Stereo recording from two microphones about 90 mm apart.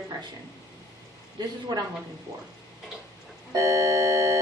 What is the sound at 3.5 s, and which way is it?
Organ, 35° right (ahead or behind).